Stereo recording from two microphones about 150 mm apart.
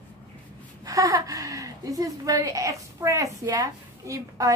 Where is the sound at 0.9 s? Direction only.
25° right (ahead or behind).